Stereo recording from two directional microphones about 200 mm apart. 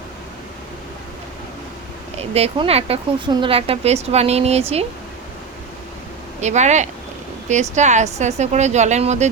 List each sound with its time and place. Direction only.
2.1 s speech: 30° right (ahead or behind)
6.4 s speech: 35° right (ahead or behind)